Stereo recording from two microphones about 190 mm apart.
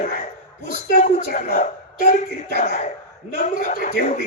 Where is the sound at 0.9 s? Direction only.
40° left (ahead or behind).